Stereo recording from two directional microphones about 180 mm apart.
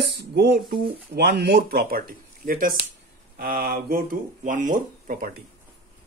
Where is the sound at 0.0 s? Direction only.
65° right (ahead or behind).